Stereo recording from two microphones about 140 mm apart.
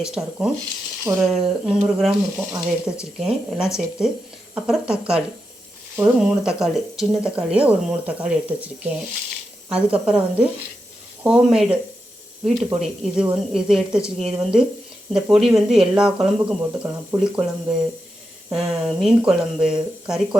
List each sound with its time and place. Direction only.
0.0 s speech: 5° right (ahead or behind)
10.1 s speech: 10° right (ahead or behind)